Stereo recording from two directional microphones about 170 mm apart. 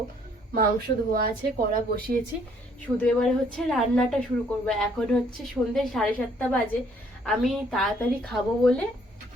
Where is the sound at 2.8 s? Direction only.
10° left (ahead or behind).